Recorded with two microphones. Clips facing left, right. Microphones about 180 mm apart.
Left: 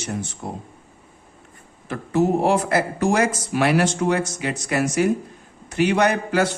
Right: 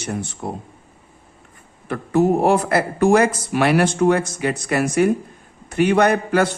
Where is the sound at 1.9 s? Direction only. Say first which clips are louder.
Right 3 dB; 55° right (ahead or behind).